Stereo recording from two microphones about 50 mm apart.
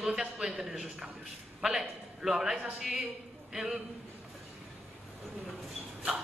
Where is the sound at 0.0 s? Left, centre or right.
Centre.